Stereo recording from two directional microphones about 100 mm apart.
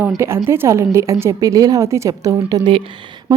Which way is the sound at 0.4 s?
25° right (ahead or behind).